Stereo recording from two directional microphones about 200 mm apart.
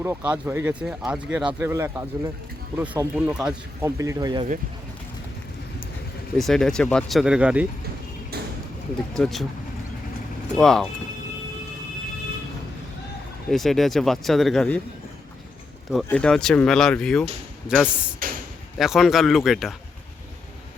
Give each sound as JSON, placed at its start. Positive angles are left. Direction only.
{"t": 0.0, "sound": "speech", "side_deg": -10}
{"t": 6.3, "sound": "speech", "side_deg": 0}
{"t": 9.1, "sound": "speech", "side_deg": 0}
{"t": 10.6, "sound": "speech", "side_deg": 0}
{"t": 13.5, "sound": "speech", "side_deg": 0}
{"t": 16.0, "sound": "speech", "side_deg": 5}
{"t": 18.2, "sound": "a sound", "side_deg": -45}
{"t": 18.8, "sound": "speech", "side_deg": 0}